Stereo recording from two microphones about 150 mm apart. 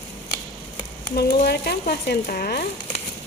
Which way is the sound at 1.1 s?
90° left.